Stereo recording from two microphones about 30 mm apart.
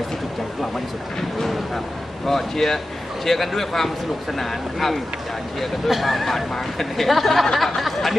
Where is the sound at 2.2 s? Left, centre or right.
Centre.